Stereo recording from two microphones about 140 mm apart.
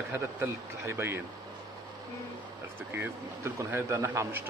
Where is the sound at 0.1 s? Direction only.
20° right (ahead or behind).